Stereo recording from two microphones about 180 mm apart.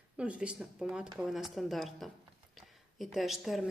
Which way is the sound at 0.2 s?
5° right (ahead or behind).